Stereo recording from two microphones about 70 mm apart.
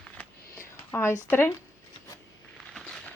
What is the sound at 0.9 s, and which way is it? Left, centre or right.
Speech, left.